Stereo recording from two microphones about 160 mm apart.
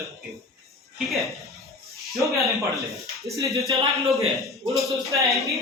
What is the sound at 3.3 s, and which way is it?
Speech, 20° right (ahead or behind).